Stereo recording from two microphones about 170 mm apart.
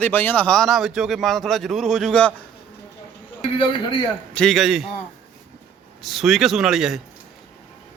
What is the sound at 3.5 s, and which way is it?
Speech, 30° left (ahead or behind).